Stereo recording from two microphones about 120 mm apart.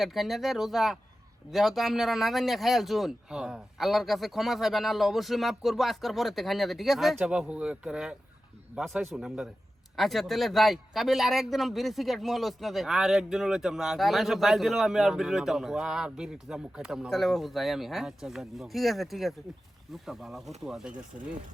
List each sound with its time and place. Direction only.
0.0 s speech: centre (ahead or behind)